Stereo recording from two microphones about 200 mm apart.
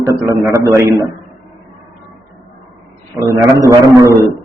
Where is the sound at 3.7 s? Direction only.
15° right (ahead or behind).